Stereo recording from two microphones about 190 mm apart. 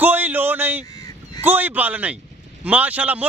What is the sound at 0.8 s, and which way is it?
Honk, 20° left (ahead or behind).